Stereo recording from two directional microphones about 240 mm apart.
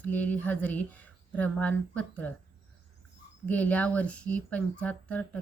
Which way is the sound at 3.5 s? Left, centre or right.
Centre.